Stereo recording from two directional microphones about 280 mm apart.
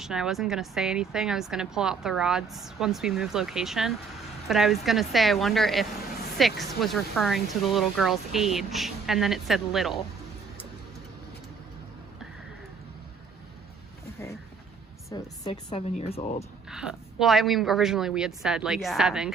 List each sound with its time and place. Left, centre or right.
0.0 s a woman's voice: centre
15.1 s speech: centre
16.6 s a woman's voice: centre